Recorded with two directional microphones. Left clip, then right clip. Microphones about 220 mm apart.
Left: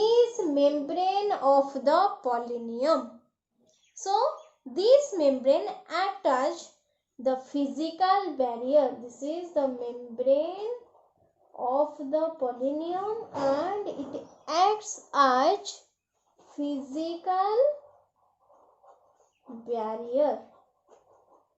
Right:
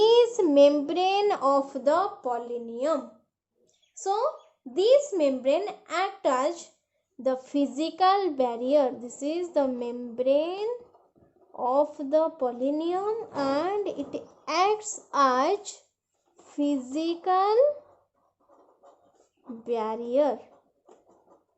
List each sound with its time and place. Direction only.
0.0 s a child's voice: 30° right (ahead or behind)
11.5 s a child's voice: 30° right (ahead or behind)
19.6 s a child's voice: 30° right (ahead or behind)